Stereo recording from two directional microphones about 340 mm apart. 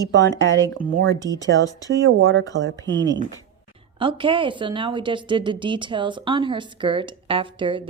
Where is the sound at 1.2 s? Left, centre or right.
Right.